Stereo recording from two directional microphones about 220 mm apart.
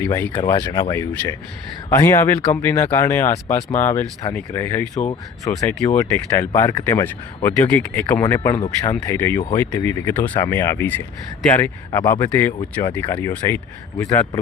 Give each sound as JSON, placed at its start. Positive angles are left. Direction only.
{"t": 0.0, "sound": "speech", "side_deg": 10}